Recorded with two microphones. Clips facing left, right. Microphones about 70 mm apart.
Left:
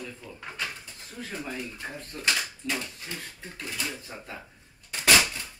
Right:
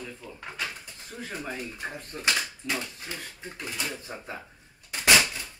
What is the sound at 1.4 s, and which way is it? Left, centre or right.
Speech, right.